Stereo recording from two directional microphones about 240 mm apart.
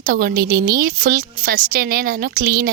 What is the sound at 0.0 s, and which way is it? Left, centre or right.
A woman's voice, right.